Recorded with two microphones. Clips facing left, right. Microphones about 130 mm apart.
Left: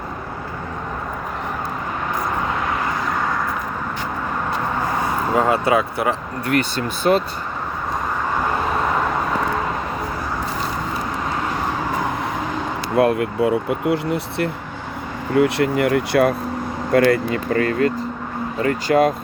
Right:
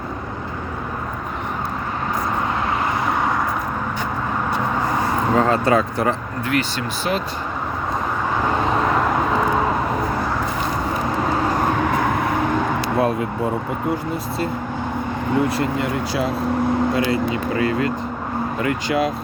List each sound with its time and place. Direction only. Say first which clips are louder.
5.3 s speech: even; 15° left (ahead or behind)
6.5 s speech: left 2 dB; 45° left (ahead or behind)
13.0 s speech: left 6 dB; 65° left (ahead or behind); by 19.1 s 45° left (ahead or behind)